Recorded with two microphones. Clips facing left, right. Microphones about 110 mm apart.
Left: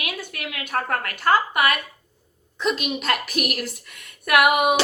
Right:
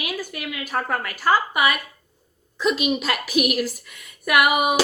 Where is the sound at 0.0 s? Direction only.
5° right (ahead or behind).